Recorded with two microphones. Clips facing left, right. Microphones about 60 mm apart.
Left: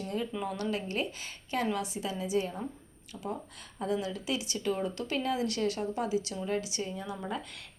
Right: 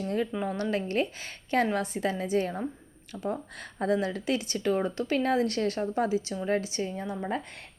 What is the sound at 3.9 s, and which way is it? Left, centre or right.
Speech, right.